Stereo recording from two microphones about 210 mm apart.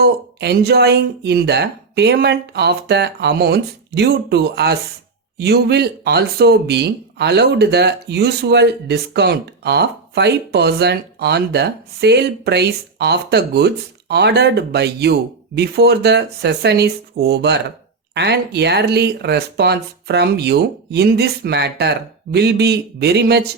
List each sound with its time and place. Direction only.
0.0 s speech: 50° right (ahead or behind)